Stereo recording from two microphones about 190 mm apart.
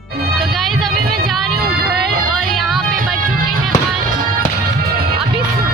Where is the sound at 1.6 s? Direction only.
55° right (ahead or behind).